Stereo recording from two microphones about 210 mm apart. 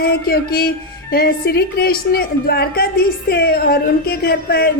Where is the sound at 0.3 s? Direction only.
45° left (ahead or behind).